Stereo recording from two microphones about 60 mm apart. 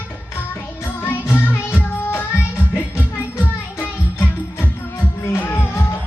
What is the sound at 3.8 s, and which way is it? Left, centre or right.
Music, left.